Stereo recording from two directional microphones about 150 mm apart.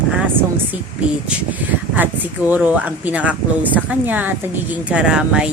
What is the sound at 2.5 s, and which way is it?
Speech, 10° right (ahead or behind).